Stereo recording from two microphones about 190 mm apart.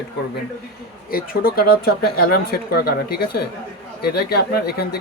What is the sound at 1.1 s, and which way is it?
Speech, 50° left (ahead or behind).